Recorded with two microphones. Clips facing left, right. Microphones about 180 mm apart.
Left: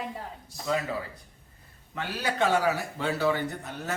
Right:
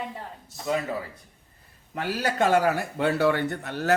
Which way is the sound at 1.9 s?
45° right (ahead or behind).